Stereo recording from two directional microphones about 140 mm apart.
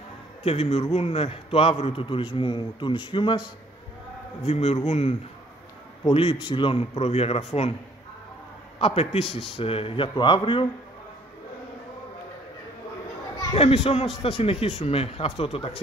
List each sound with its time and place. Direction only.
0.4 s a man's voice: 45° left (ahead or behind)
4.5 s speech: 45° left (ahead or behind)
8.7 s a man's voice: 45° left (ahead or behind)
13.6 s speech: 40° left (ahead or behind)